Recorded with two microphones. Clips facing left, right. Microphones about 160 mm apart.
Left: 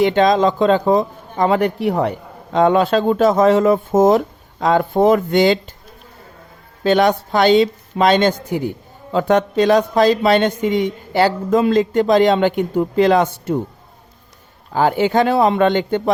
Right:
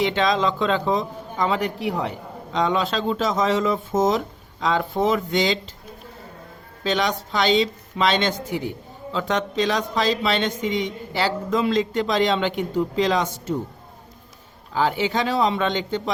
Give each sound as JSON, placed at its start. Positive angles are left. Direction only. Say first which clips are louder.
{"t": 0.0, "sound": "a man's voice", "louder": "left 7 dB", "side_deg": 50}
{"t": 6.8, "sound": "a man's voice", "louder": "left 9 dB", "side_deg": 55}
{"t": 14.7, "sound": "a man's voice", "louder": "left 6 dB", "side_deg": 50}